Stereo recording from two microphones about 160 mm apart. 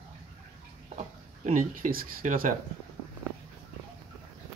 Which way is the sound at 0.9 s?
50° right (ahead or behind).